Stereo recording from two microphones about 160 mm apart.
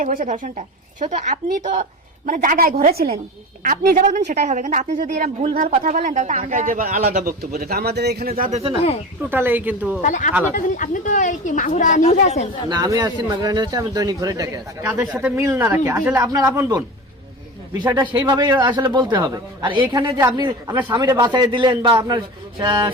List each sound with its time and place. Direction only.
0.0 s a woman's voice: 55° right (ahead or behind); by 3.2 s 75° right (ahead or behind)
3.6 s speech: 55° right (ahead or behind)
5.5 s speech: 60° right (ahead or behind)
7.5 s speech: 75° right (ahead or behind)
8.4 s speech: 40° right (ahead or behind)
9.3 s speech: 10° right (ahead or behind)
10.0 s a woman's voice: 50° left (ahead or behind)
12.6 s a man's voice: 20° right (ahead or behind)